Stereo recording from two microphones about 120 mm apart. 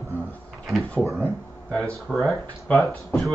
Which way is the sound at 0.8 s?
5° left (ahead or behind).